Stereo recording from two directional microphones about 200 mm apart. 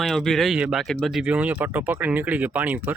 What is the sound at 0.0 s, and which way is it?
Speech, centre (ahead or behind).